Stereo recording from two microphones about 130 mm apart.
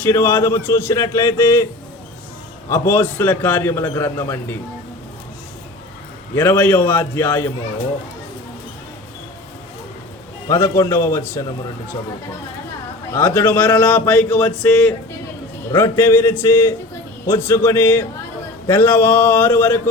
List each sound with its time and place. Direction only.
0.0 s a man's voice: 20° left (ahead or behind)
2.6 s a man's voice: 20° left (ahead or behind)
6.3 s a man's voice: 15° left (ahead or behind)
10.5 s a man's voice: 20° left (ahead or behind)
13.1 s a man's voice: 15° left (ahead or behind)